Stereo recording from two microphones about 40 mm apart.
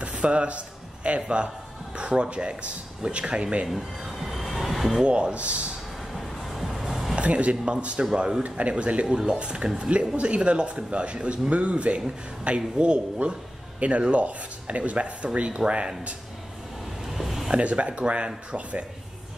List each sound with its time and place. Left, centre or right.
0.1 s a sound: right
2.0 s a man's voice: right
4.2 s train: centre
5.0 s a man's voice: right
6.1 s music: centre
7.2 s a man's voice: right
17.0 s a sound: centre
17.6 s speech: right